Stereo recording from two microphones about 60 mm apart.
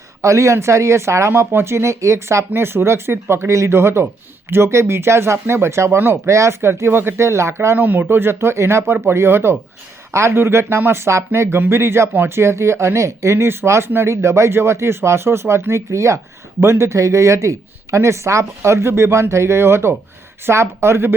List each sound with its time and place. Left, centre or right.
0.2 s speech: right
2.5 s speech: right
7.8 s speech: right
8.1 s speech: right